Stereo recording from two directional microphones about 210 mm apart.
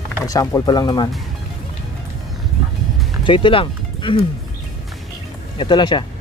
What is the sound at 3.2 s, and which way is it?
Speech, 25° left (ahead or behind).